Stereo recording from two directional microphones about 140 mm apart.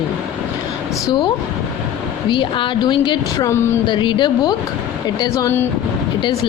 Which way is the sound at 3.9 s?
35° left (ahead or behind).